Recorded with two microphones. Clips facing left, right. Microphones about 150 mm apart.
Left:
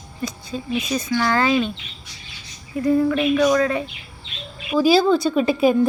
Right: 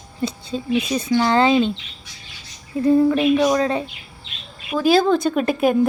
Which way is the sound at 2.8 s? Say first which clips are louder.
Right 3 dB; 25° right (ahead or behind).